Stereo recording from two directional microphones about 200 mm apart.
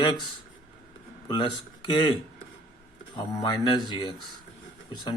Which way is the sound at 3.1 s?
20° left (ahead or behind).